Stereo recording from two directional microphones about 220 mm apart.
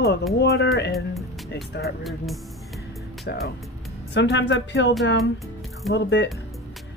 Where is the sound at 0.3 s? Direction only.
50° left (ahead or behind).